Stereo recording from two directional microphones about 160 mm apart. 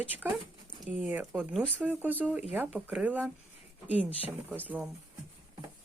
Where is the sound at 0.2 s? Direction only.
15° right (ahead or behind).